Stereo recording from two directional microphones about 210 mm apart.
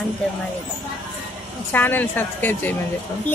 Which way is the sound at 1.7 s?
10° left (ahead or behind).